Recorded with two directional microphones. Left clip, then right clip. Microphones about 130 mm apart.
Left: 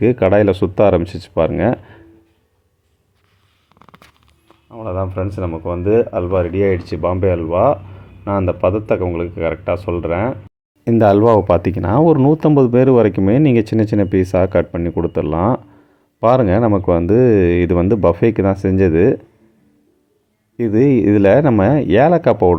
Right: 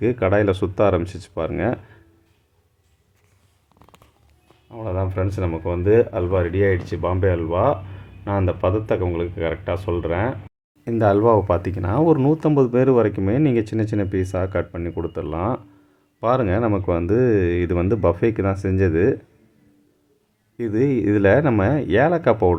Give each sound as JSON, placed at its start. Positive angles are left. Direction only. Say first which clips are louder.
{"t": 0.0, "sound": "speech", "louder": "left 6 dB", "side_deg": 30}
{"t": 3.8, "sound": "a sound", "louder": "left 6 dB", "side_deg": -5}
{"t": 4.7, "sound": "speech", "louder": "left 4 dB", "side_deg": 10}
{"t": 10.8, "sound": "speech", "louder": "left 6 dB", "side_deg": 45}
{"t": 20.6, "sound": "speech", "louder": "left 7 dB", "side_deg": 35}